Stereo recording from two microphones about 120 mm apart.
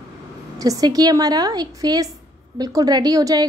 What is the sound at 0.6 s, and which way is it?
A woman's voice, 30° right (ahead or behind).